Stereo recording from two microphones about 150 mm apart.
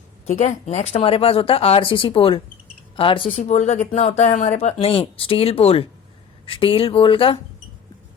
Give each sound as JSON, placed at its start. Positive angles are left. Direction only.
{"t": 0.3, "sound": "speech", "side_deg": 55}
{"t": 3.2, "sound": "speech", "side_deg": 50}